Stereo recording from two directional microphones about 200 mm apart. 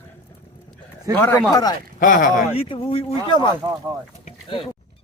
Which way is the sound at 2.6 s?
25° left (ahead or behind).